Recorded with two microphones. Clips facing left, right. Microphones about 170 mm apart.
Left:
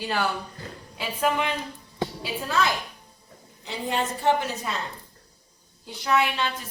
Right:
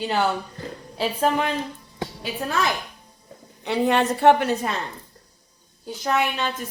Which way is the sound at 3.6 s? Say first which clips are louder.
Right 8 dB; 65° right (ahead or behind).